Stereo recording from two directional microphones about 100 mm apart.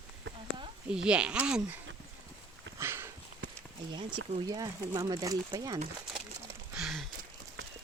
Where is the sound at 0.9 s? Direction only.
10° right (ahead or behind).